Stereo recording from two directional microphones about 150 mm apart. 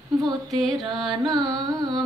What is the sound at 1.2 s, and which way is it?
Carnatic music, 25° right (ahead or behind).